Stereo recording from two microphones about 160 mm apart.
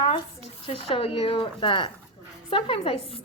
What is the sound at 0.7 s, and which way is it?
A woman's voice, 35° left (ahead or behind).